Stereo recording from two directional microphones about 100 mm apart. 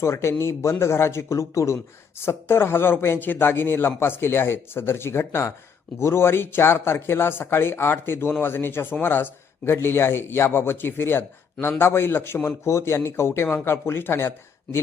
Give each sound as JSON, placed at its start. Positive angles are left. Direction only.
{"t": 0.0, "sound": "speech", "side_deg": 25}